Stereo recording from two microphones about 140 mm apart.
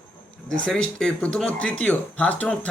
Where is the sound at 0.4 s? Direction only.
5° left (ahead or behind).